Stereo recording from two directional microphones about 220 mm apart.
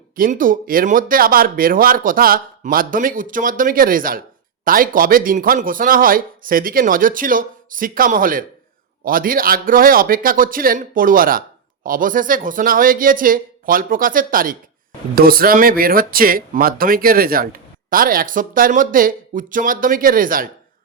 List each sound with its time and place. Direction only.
0.2 s a man's voice: 40° right (ahead or behind)